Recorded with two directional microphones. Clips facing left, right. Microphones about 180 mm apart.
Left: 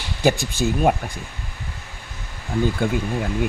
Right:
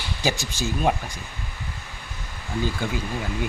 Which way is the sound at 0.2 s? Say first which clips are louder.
Left 7 dB; 55° left (ahead or behind).